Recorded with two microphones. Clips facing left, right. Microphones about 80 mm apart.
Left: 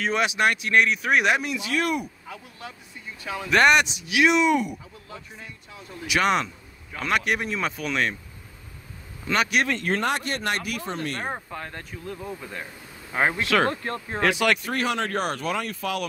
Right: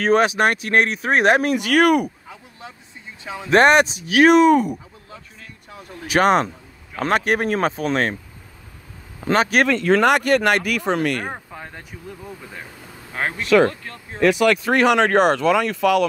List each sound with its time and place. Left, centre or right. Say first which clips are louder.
0.0 s speech: right 6 dB; right
2.2 s a sound: even; centre
3.4 s speech: right 5 dB; right
7.4 s speech: right 8 dB; right
7.7 s speech: right 5 dB; right
9.3 s speech: right 6 dB; right
9.9 s speech: right 10 dB; right
11.3 s speech: left 1 dB; centre
13.3 s speech: right 11 dB; left
14.7 s speech: right 10 dB; right